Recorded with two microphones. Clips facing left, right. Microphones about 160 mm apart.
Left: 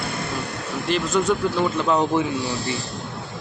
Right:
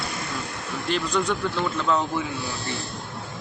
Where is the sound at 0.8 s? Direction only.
5° left (ahead or behind).